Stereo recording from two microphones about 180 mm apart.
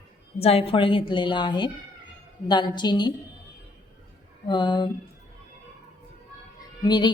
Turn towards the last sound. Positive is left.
turn(degrees=25)  # may be behind; listen again after turning